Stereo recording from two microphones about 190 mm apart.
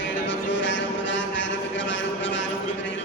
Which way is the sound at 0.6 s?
75° left (ahead or behind).